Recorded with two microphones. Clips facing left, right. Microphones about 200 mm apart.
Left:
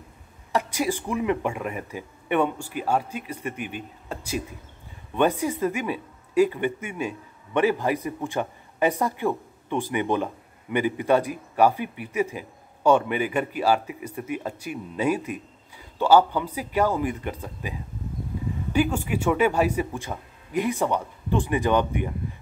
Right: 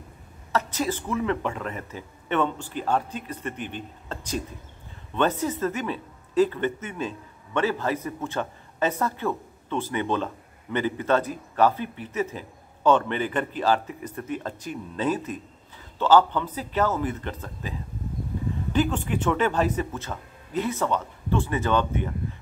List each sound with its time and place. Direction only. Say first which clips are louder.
0.5 s speech: left 1 dB; 15° left (ahead or behind)